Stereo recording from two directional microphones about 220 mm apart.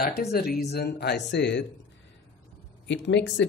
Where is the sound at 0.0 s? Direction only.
45° left (ahead or behind).